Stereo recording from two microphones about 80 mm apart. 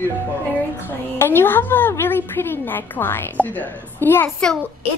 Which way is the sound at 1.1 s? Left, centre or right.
Left.